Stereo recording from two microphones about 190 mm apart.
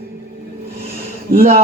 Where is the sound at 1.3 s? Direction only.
50° right (ahead or behind).